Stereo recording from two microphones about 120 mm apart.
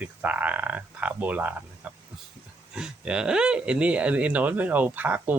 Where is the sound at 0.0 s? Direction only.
10° right (ahead or behind).